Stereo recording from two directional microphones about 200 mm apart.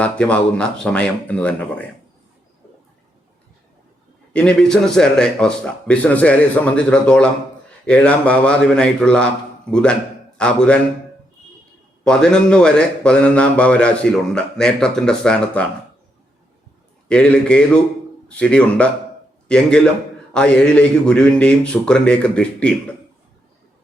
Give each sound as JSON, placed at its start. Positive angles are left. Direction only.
{"t": 0.0, "sound": "a man's voice", "side_deg": 5}
{"t": 4.3, "sound": "a man's voice", "side_deg": 5}
{"t": 12.0, "sound": "a man's voice", "side_deg": 5}
{"t": 17.1, "sound": "a man's voice", "side_deg": 5}